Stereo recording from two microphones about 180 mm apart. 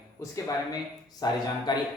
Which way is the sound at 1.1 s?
20° left (ahead or behind).